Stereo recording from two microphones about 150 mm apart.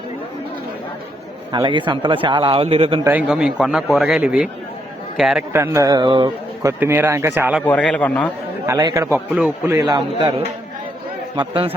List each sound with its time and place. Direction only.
1.5 s speech: 30° right (ahead or behind)
3.0 s a man's voice: 10° right (ahead or behind)
5.5 s speech: 20° right (ahead or behind)
6.6 s speech: 20° right (ahead or behind)
7.6 s a man's voice: 10° left (ahead or behind)
8.6 s speech: 20° right (ahead or behind)
11.3 s speech: 35° right (ahead or behind)